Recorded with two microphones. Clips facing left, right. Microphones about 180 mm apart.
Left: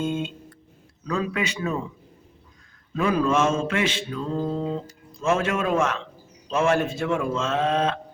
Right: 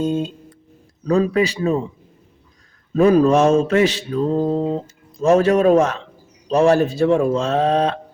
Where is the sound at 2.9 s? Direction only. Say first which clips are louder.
Right 9 dB; 40° right (ahead or behind).